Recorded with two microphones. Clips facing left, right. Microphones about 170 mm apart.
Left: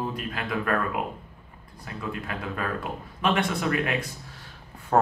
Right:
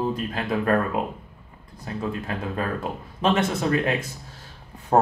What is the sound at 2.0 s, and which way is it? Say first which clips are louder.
Speech: right 4 dB; 30° right (ahead or behind).